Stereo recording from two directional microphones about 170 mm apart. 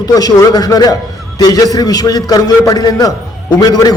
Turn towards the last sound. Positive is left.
turn(degrees=20)  # may be behind; listen again after turning